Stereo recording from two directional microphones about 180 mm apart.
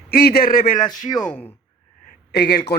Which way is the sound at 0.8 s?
20° left (ahead or behind).